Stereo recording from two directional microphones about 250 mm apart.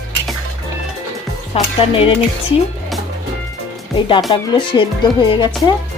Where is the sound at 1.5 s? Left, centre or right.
Left.